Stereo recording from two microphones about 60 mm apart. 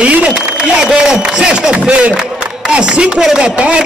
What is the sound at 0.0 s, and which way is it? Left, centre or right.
A man's voice, right.